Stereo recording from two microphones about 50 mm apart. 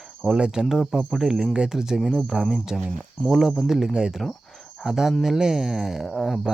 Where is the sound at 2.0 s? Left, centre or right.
Centre.